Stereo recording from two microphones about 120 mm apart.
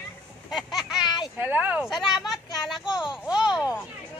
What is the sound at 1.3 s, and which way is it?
Speech, 15° right (ahead or behind).